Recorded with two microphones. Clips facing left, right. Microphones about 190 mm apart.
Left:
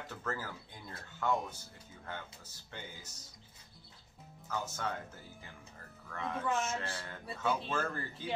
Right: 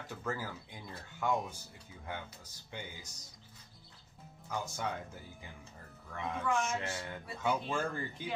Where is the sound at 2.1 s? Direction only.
10° right (ahead or behind).